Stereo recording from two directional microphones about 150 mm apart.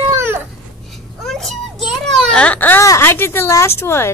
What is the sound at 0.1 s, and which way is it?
Babbling, 15° right (ahead or behind).